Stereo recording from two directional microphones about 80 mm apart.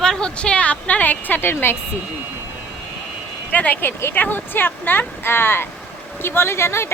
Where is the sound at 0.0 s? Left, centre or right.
Centre; by 1.7 s left.